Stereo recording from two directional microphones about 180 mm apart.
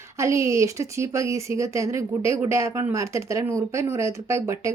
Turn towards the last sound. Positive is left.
turn(degrees=-15)  # may be behind; listen again after turning